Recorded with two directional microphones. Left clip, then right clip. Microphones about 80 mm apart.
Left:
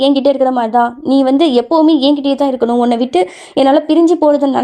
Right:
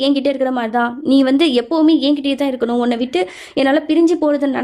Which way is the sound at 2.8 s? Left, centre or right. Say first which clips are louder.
Left 5 dB; left.